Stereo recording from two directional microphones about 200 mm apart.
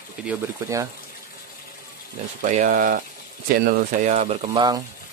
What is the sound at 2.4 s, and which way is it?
Speech, 40° right (ahead or behind).